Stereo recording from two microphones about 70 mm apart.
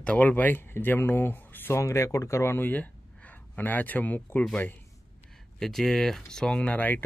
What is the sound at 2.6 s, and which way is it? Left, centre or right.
Speech, left.